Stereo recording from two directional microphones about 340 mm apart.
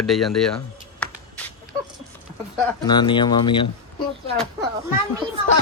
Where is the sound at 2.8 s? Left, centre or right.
Centre.